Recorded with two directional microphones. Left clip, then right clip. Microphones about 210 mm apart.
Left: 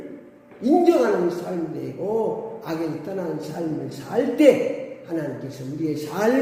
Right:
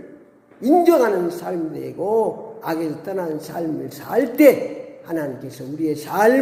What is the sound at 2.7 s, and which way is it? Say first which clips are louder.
A man's voice: right 5 dB; 40° right (ahead or behind).